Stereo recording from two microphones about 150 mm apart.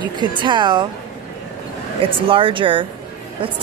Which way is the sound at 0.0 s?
30° right (ahead or behind).